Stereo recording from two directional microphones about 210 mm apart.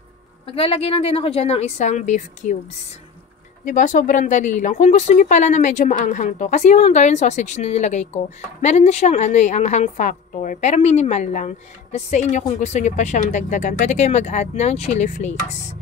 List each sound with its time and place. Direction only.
0.6 s a woman's voice: 25° left (ahead or behind)
3.6 s speech: 40° left (ahead or behind)